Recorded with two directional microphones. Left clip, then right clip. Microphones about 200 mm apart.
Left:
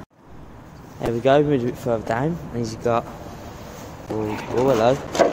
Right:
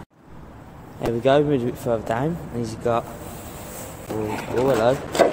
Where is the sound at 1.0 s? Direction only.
5° left (ahead or behind).